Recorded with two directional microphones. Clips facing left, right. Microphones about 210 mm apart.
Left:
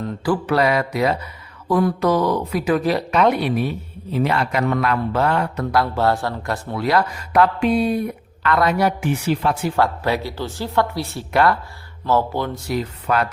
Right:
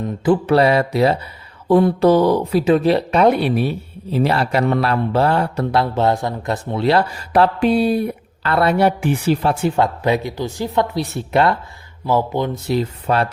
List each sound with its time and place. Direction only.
0.0 s speech: 25° right (ahead or behind)
9.7 s speech: 20° right (ahead or behind)